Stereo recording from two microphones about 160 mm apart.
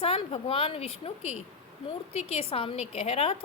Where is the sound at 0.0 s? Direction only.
35° left (ahead or behind).